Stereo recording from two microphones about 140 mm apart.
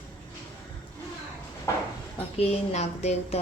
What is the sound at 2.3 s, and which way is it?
Speech, 50° left (ahead or behind).